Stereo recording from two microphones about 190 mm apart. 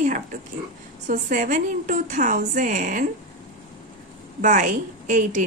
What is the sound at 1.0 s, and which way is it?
A woman's voice, 45° right (ahead or behind).